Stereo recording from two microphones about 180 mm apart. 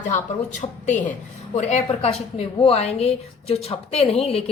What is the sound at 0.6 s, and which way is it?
A woman's voice, 30° left (ahead or behind).